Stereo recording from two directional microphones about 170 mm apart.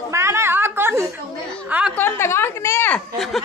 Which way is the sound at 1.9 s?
15° left (ahead or behind).